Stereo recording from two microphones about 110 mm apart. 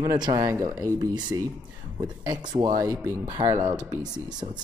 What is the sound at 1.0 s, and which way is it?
Speech, 40° right (ahead or behind).